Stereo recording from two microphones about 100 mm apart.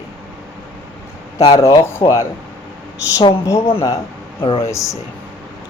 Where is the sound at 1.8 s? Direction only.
30° left (ahead or behind).